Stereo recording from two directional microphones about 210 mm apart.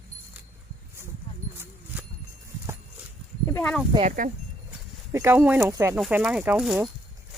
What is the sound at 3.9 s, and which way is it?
Speech, 30° right (ahead or behind).